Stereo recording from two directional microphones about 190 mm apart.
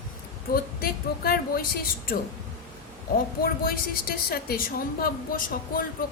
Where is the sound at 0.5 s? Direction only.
50° left (ahead or behind).